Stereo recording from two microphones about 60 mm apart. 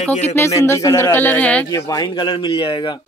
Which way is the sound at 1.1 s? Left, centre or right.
Left.